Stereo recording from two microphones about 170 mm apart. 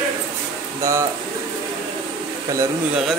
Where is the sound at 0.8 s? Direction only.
15° right (ahead or behind).